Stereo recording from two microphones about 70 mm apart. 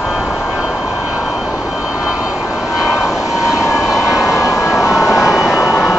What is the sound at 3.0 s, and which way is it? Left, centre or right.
Vehicle, centre.